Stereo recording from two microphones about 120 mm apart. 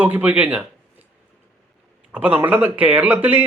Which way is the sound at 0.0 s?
15° right (ahead or behind).